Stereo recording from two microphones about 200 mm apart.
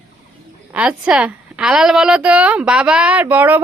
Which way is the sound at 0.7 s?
5° right (ahead or behind).